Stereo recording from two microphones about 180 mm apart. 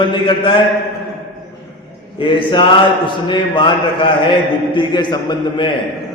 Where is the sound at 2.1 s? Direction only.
25° left (ahead or behind).